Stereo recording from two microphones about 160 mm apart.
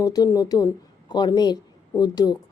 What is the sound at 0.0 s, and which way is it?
A woman's voice, 20° left (ahead or behind).